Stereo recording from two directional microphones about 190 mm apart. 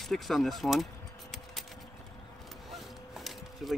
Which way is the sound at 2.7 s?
Centre (ahead or behind).